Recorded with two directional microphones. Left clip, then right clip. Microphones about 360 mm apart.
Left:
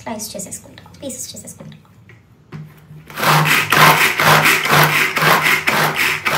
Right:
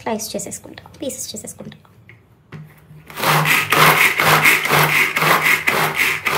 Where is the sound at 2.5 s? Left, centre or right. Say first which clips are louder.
Left 2 dB; centre.